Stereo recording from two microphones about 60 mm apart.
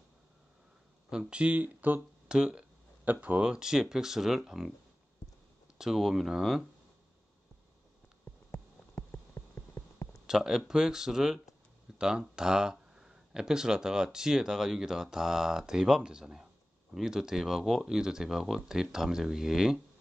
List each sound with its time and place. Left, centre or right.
1.1 s speech: centre
2.2 s speech: centre
3.1 s speech: right
3.4 s speech: centre
5.8 s speech: centre
8.9 s a sound: left
10.2 s speech: centre